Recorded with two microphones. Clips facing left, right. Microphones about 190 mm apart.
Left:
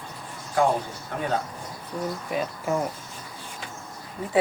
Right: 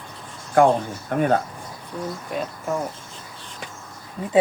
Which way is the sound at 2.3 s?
5° left (ahead or behind).